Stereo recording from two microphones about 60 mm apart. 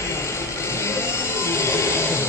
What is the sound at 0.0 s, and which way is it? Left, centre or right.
Vehicle, left.